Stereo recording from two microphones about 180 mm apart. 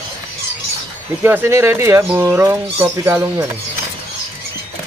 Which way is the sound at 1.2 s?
10° right (ahead or behind).